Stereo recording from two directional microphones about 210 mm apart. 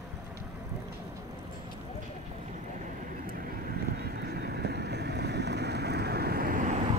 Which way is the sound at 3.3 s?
45° right (ahead or behind).